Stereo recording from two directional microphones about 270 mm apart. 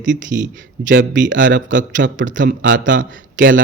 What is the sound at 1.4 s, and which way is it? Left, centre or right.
Speech, right.